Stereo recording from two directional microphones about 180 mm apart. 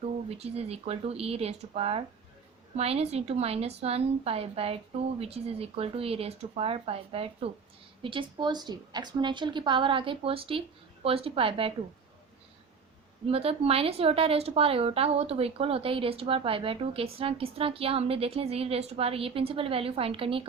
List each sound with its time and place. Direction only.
0.3 s a woman's voice: 35° right (ahead or behind)
13.2 s speech: 35° right (ahead or behind)